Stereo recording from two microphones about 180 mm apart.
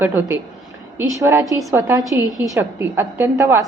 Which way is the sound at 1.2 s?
20° right (ahead or behind).